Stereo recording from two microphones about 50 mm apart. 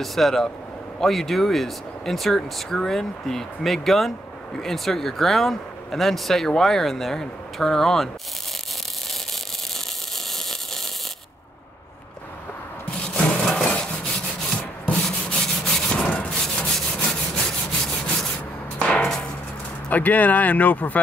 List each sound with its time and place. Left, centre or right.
0.0 s speech: centre
10.3 s a sound: centre
13.0 s wood: centre
13.7 s rub: left
18.8 s hammer: left
19.9 s speech: left